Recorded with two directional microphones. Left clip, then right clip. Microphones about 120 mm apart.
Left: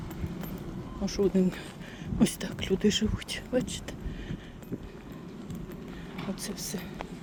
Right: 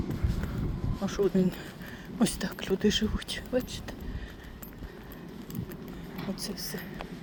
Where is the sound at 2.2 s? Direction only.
15° left (ahead or behind); by 3.8 s 35° left (ahead or behind).